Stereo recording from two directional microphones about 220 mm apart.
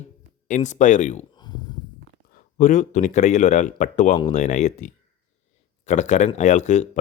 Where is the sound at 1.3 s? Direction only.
20° left (ahead or behind).